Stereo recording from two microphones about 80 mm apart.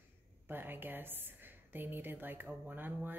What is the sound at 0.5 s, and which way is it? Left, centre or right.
A woman's voice, right.